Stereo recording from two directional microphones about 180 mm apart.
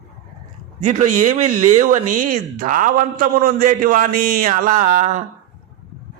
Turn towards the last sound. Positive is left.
turn(degrees=-40)  # may be behind; listen again after turning